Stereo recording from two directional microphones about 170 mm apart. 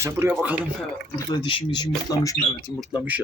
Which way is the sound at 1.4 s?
30° left (ahead or behind).